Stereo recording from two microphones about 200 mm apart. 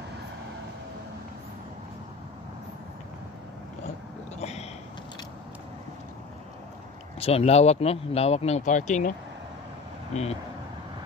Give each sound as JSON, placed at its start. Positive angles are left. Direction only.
{"t": 4.4, "sound": "a sound", "side_deg": 30}
{"t": 7.2, "sound": "speech", "side_deg": 30}
{"t": 10.1, "sound": "speech", "side_deg": 35}